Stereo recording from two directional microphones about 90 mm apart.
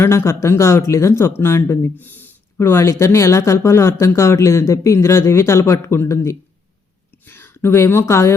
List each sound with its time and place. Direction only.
0.0 s speech: 30° left (ahead or behind)